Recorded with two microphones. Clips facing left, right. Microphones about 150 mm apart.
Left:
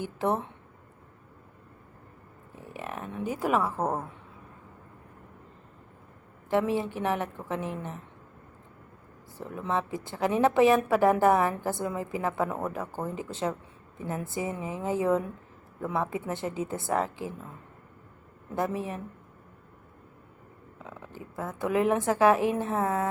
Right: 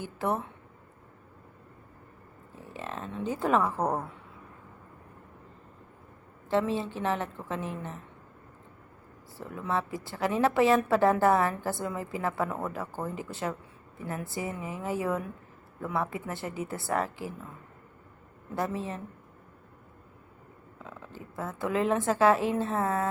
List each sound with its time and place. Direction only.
0.0 s speech: 20° left (ahead or behind)
2.6 s a woman's voice: 15° left (ahead or behind)
6.5 s a woman's voice: 15° left (ahead or behind)
9.4 s a woman's voice: 20° left (ahead or behind)
18.5 s a woman's voice: 15° left (ahead or behind)
20.7 s a woman's voice: 15° left (ahead or behind)